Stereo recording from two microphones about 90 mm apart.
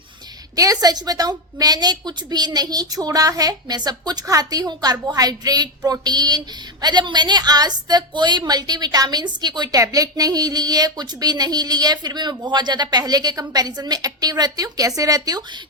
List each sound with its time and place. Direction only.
0.5 s a woman's voice: 40° right (ahead or behind)